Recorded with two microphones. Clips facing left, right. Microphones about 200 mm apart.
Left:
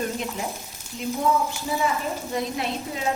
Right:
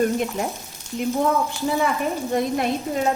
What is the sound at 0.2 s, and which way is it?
Speech, 55° right (ahead or behind).